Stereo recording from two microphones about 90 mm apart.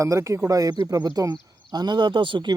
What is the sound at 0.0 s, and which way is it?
Speech, 35° right (ahead or behind).